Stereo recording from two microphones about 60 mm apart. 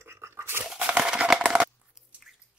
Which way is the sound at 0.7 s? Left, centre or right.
Centre.